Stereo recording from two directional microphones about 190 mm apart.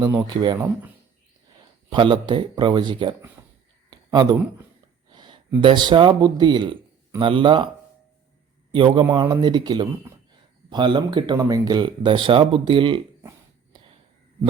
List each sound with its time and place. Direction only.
0.0 s speech: 15° right (ahead or behind)
1.9 s speech: 25° right (ahead or behind)
8.7 s speech: 25° right (ahead or behind)
9.0 s speech: 15° right (ahead or behind)